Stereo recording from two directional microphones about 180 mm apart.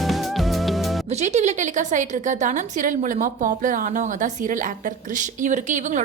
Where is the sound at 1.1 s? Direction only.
40° right (ahead or behind).